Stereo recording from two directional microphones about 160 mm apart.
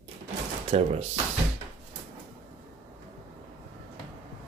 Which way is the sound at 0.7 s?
40° right (ahead or behind).